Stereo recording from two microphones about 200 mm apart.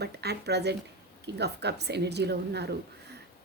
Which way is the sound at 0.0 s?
55° right (ahead or behind).